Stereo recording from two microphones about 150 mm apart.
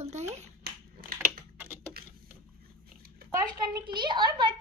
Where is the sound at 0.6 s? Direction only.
80° right.